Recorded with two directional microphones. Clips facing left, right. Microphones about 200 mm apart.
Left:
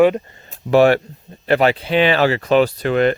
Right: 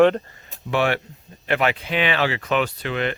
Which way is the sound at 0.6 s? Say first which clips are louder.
Left 9 dB; 40° left (ahead or behind).